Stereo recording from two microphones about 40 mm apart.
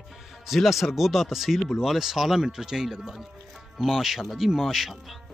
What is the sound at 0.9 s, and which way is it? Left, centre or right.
Speech, centre.